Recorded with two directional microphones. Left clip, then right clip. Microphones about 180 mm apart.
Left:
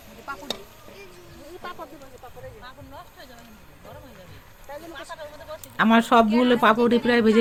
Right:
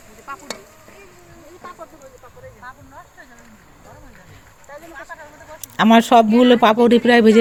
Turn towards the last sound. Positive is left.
turn(degrees=-35)  # may be behind; listen again after turning